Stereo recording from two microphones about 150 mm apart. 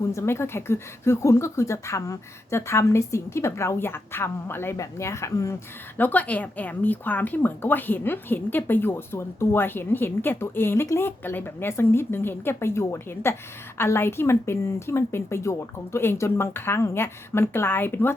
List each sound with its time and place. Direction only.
0.0 s a woman's voice: 20° left (ahead or behind)